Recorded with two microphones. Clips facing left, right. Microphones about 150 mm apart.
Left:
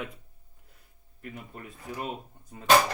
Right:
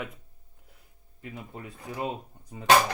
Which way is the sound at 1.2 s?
15° right (ahead or behind).